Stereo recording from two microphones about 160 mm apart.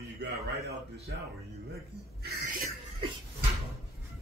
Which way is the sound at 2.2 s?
80° right.